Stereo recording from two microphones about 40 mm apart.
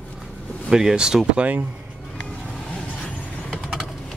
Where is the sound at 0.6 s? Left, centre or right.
Centre.